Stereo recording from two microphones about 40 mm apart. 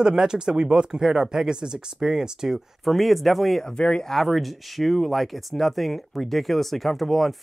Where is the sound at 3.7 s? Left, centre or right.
Left.